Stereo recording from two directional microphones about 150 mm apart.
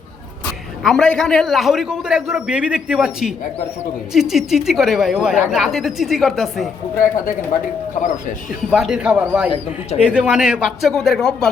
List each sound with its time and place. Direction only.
0.9 s speech: 5° left (ahead or behind)
6.9 s speech: 65° left (ahead or behind)
8.7 s speech: centre (ahead or behind)